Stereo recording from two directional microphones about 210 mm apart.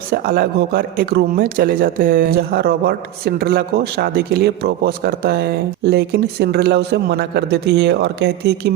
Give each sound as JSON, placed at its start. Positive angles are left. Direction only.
{"t": 0.1, "sound": "speech", "side_deg": -45}